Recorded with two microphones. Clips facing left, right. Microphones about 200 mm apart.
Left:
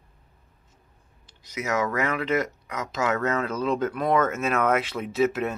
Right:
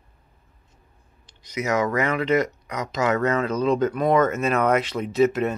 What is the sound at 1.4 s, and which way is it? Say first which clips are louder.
Speech: right 3 dB; 5° left (ahead or behind).